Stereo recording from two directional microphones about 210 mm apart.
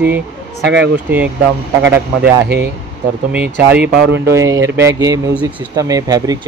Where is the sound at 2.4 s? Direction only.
50° right (ahead or behind).